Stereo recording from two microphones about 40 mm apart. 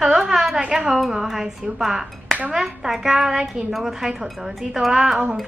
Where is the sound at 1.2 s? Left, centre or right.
Centre.